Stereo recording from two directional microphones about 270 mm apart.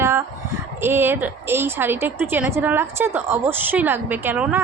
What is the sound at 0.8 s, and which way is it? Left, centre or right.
Speech, centre.